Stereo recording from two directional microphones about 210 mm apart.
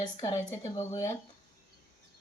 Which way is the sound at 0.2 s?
15° left (ahead or behind).